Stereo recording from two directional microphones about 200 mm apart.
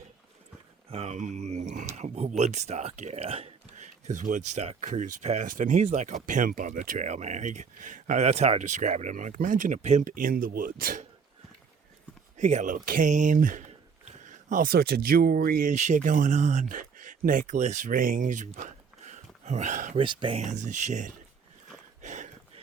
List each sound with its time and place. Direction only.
0.9 s speech: 30° right (ahead or behind)
12.4 s speech: 35° right (ahead or behind)
20.0 s speech: 25° right (ahead or behind)
22.0 s a sound: 35° right (ahead or behind)